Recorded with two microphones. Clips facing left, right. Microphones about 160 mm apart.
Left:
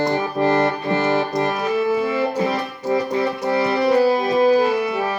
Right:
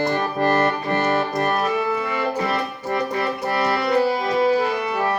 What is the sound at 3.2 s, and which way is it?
Music, 70° right (ahead or behind).